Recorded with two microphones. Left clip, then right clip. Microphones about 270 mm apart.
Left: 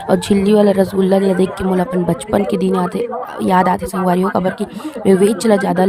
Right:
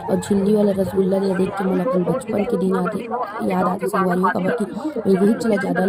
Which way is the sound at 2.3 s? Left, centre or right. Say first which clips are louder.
Left 7 dB; left.